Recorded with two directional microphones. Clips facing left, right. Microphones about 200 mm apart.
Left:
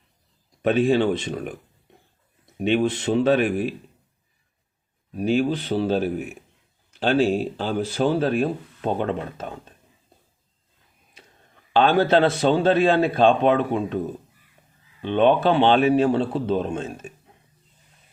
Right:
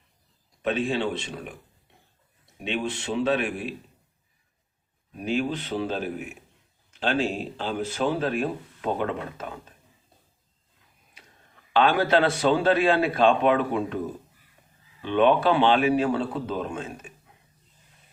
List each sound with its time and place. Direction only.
0.6 s speech: 45° left (ahead or behind)
2.6 s speech: 40° left (ahead or behind)
5.1 s speech: 35° left (ahead or behind)
11.7 s a man's voice: 30° left (ahead or behind)
15.0 s a man's voice: 25° left (ahead or behind)